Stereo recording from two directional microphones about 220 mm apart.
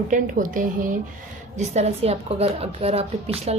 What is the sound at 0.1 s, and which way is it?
A woman's voice, 35° right (ahead or behind).